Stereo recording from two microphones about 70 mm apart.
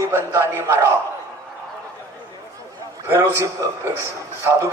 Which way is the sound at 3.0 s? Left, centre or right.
Right.